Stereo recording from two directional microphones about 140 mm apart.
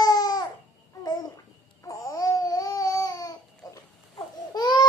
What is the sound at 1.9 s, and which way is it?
Babbling, 25° left (ahead or behind).